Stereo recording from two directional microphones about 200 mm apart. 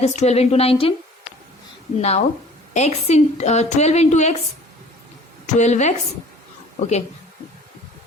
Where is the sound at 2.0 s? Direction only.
35° left (ahead or behind).